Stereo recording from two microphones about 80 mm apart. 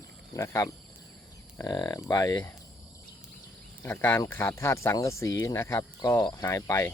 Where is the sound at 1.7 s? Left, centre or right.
Left.